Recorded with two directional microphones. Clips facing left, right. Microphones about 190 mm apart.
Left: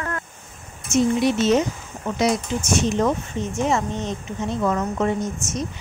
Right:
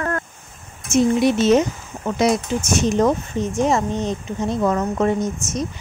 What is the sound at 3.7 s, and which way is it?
A woman's voice, 35° right (ahead or behind).